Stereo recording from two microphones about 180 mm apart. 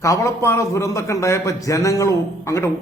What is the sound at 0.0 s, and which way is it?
A man's voice, 20° left (ahead or behind).